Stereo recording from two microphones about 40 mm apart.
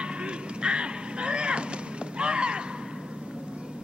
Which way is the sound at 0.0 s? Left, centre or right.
Right.